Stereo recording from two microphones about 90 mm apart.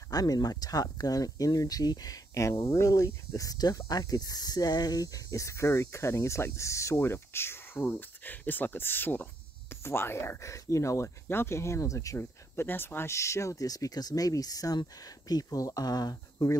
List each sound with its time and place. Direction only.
0.1 s speech: 45° left (ahead or behind)
12.2 s speech: 25° left (ahead or behind); by 16.4 s 45° left (ahead or behind)